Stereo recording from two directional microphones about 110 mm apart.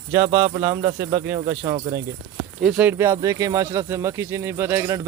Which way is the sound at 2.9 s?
25° right (ahead or behind).